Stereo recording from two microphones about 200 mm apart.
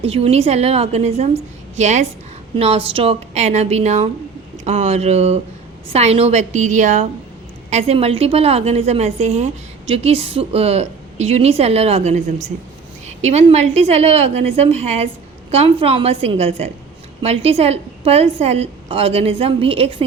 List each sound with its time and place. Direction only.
0.0 s a woman's voice: 30° right (ahead or behind)